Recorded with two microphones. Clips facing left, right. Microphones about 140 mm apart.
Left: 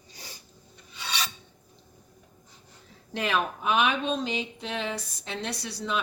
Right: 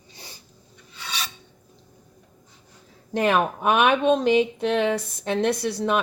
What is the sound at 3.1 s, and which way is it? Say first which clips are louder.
Speech: right 7 dB; 50° right (ahead or behind).